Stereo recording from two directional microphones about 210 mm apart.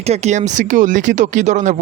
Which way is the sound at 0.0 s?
30° right (ahead or behind).